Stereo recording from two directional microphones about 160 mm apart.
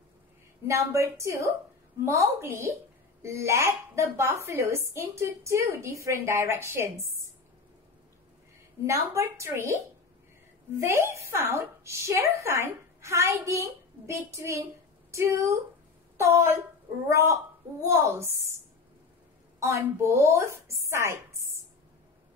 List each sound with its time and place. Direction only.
0.7 s a woman's voice: 20° right (ahead or behind)
8.8 s speech: 20° right (ahead or behind)
10.8 s speech: 15° right (ahead or behind)
19.6 s speech: 15° right (ahead or behind)